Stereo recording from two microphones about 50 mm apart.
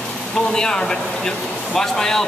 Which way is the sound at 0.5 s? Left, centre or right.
Centre.